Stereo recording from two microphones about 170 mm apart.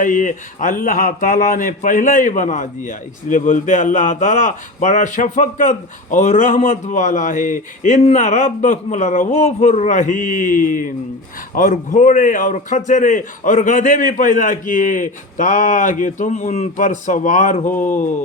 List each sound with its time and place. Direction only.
0.0 s speech: 50° left (ahead or behind)